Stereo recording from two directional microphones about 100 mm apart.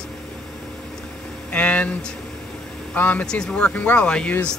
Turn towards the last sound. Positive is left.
turn(degrees=10)  # may be behind; listen again after turning